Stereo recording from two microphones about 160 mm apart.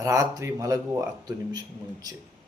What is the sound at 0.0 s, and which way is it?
Speech, 20° right (ahead or behind).